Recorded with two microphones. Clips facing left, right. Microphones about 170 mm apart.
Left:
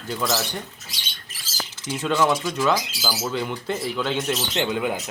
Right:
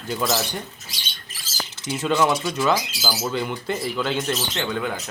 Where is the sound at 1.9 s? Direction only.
Centre (ahead or behind).